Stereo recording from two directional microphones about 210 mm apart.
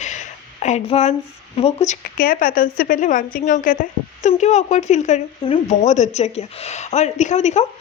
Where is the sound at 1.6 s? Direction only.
30° left (ahead or behind).